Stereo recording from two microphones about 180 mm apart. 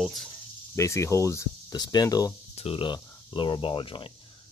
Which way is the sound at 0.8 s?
15° left (ahead or behind).